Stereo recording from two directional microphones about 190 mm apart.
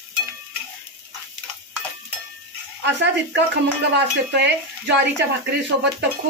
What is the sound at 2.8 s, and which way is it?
Speech, 65° right (ahead or behind).